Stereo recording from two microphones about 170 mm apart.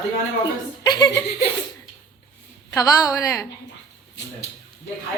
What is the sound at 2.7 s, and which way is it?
Speech, 20° left (ahead or behind).